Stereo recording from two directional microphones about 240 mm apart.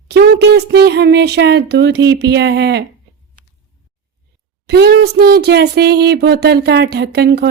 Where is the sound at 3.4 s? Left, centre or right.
Right.